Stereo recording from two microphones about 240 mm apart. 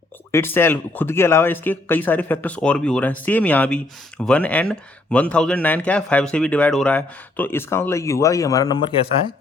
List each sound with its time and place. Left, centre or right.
0.3 s speech: centre